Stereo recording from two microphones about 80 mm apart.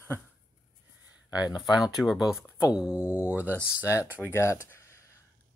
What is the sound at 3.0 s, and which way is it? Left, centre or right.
Speech, left.